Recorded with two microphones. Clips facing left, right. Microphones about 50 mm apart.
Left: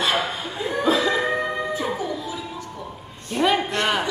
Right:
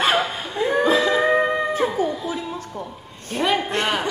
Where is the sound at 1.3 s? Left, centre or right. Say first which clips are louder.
Right 5 dB; right.